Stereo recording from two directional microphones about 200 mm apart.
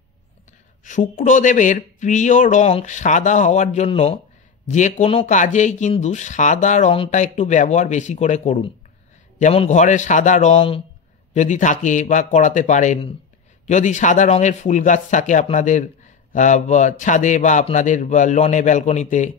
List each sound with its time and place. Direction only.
0.8 s speech: 40° left (ahead or behind)